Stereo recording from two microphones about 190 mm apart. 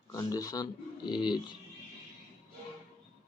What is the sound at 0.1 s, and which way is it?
Speech, 20° left (ahead or behind).